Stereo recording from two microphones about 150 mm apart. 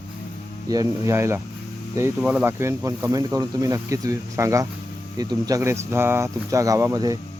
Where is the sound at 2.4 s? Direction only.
15° right (ahead or behind).